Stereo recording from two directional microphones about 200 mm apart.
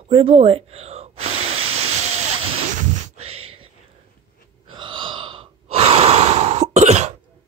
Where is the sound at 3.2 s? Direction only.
30° right (ahead or behind).